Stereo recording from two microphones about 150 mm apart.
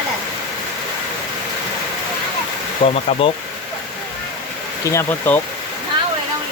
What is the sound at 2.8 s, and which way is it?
Speech, 45° left (ahead or behind).